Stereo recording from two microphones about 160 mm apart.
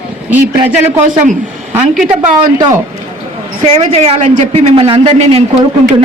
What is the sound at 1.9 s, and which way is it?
Speech, centre (ahead or behind).